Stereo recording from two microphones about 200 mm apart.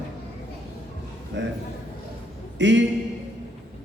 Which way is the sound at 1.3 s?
60° right (ahead or behind).